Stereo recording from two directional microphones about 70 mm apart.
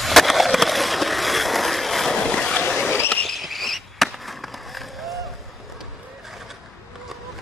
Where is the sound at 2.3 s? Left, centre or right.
Centre.